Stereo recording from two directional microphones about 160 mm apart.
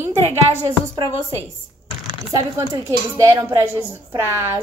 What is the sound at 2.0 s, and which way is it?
A child's voice, 20° right (ahead or behind).